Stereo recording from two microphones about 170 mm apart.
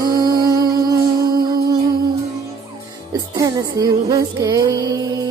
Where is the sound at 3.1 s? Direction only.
20° right (ahead or behind).